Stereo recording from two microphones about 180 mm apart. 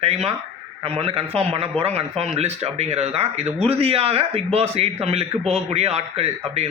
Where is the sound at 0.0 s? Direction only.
35° right (ahead or behind).